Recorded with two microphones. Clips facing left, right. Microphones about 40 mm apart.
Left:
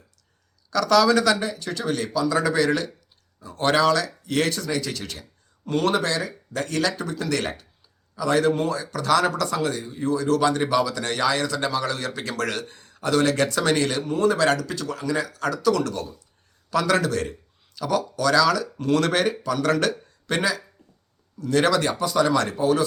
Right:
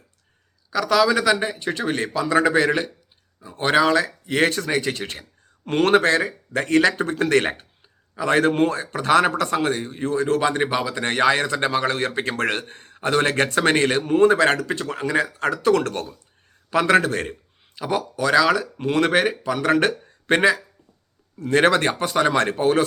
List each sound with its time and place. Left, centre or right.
0.7 s speech: centre; by 9.8 s right
9.8 s speech: right
16.6 s speech: right